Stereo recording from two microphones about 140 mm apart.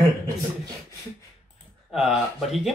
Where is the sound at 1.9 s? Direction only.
Centre (ahead or behind).